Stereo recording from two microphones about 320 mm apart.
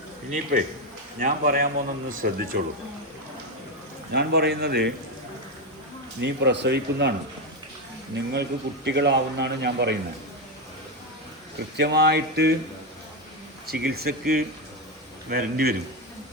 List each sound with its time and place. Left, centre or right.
1.2 s a man's voice: right
4.1 s a man's voice: right
6.1 s a man's voice: right
8.1 s a man's voice: right
11.8 s a man's voice: right
13.7 s a man's voice: right
15.3 s a man's voice: right